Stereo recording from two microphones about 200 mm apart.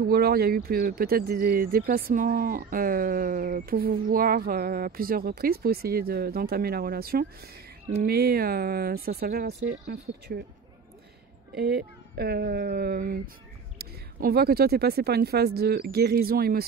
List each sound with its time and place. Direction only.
0.0 s speech: 50° right (ahead or behind)
11.5 s speech: 50° right (ahead or behind)